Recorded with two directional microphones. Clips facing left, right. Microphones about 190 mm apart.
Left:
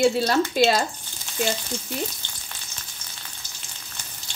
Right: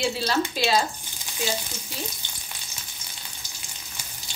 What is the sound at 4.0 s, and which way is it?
Frying, 10° right (ahead or behind).